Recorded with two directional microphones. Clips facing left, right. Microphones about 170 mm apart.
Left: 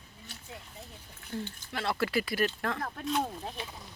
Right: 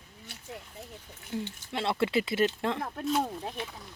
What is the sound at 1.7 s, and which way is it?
Speech, 25° right (ahead or behind).